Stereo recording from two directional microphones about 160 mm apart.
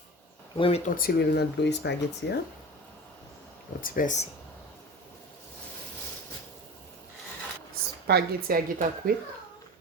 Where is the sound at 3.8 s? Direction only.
60° left (ahead or behind).